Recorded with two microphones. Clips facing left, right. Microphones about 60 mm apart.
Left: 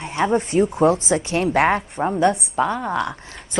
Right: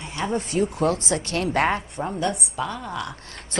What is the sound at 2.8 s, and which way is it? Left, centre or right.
Speech, left.